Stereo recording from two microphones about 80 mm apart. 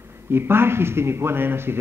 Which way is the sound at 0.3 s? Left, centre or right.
Right.